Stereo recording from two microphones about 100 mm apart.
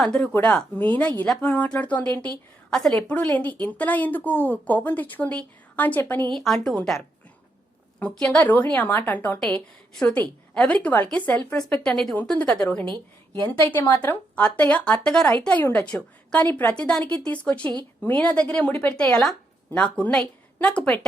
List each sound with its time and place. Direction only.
0.0 s a woman's voice: 10° left (ahead or behind)
6.3 s a woman's voice: 5° left (ahead or behind)
8.1 s a woman's voice: 10° left (ahead or behind)
12.8 s a woman's voice: 50° right (ahead or behind)
13.5 s a woman's voice: 15° left (ahead or behind)